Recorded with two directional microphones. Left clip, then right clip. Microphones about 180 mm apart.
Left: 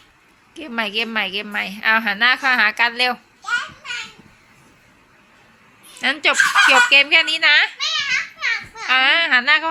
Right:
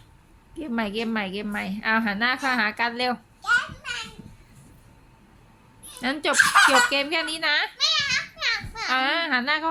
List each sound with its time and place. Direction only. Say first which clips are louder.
0.5 s a woman's voice: left 6 dB; 5° right (ahead or behind)
6.0 s a woman's voice: left 5 dB; 5° right (ahead or behind)
7.8 s children playing: left 2 dB; 45° right (ahead or behind)
8.9 s a woman's voice: left 8 dB; 5° right (ahead or behind)